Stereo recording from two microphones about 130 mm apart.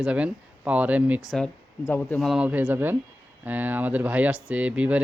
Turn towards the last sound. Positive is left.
turn(degrees=-10)  # may be behind; listen again after turning